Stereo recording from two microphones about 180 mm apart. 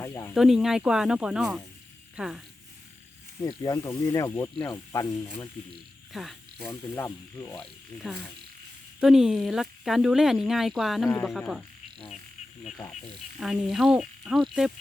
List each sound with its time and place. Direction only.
0.0 s speech: 15° left (ahead or behind)
0.3 s speech: centre (ahead or behind)
3.6 s speech: 20° left (ahead or behind)
6.1 s speech: centre (ahead or behind)
6.7 s speech: 15° left (ahead or behind)
13.4 s speech: centre (ahead or behind)